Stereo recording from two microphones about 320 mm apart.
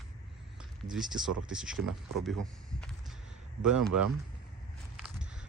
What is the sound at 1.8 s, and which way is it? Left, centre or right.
Speech, right.